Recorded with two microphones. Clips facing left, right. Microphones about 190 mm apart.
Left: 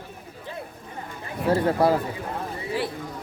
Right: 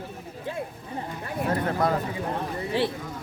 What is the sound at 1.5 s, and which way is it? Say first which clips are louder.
Speech: left 5 dB; 30° left (ahead or behind).